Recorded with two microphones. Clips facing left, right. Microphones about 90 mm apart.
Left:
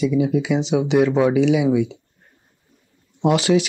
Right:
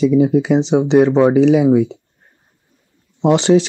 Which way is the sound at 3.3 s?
30° right (ahead or behind).